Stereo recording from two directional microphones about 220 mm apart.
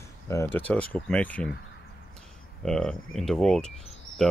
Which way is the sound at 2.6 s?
Centre (ahead or behind).